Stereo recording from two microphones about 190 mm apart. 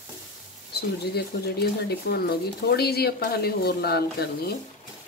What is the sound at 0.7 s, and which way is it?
Speech, 55° left (ahead or behind).